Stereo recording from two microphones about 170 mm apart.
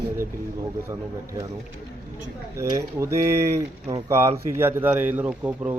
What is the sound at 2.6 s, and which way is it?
Speech, 15° right (ahead or behind).